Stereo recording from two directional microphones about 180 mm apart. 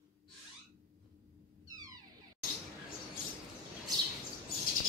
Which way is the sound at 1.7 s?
20° right (ahead or behind).